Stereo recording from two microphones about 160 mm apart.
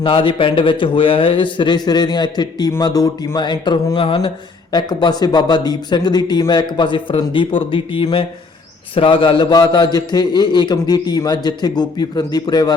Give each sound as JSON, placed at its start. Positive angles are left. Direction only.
{"t": 0.0, "sound": "a man's voice", "side_deg": 30}